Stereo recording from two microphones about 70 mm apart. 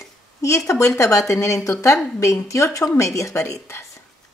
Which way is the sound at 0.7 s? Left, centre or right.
Left.